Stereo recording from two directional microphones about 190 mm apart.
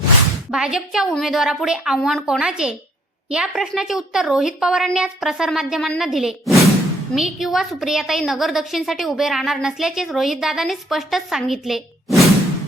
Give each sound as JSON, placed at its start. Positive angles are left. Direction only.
{"t": 0.5, "sound": "a woman's voice", "side_deg": -5}